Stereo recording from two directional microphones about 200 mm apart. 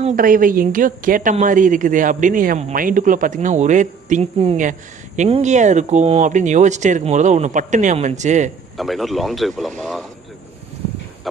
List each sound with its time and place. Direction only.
0.0 s a woman's voice: 45° right (ahead or behind)
8.7 s speech: centre (ahead or behind)